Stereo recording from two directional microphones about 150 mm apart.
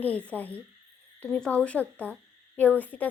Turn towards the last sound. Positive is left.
turn(degrees=10)  # may be behind; listen again after turning